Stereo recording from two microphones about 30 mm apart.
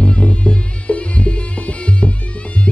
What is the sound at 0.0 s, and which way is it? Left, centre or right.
Music, left.